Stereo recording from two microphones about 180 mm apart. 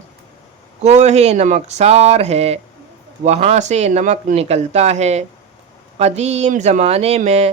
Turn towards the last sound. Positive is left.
turn(degrees=-35)  # may be behind; listen again after turning